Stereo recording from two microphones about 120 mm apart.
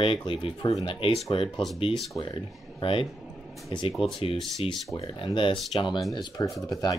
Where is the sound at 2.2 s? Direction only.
45° left (ahead or behind).